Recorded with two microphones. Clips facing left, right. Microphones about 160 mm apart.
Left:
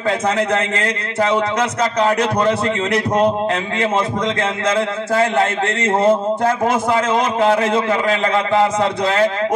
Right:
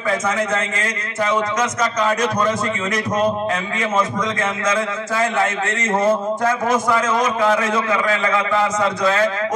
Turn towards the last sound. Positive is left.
turn(degrees=30)  # may be behind; listen again after turning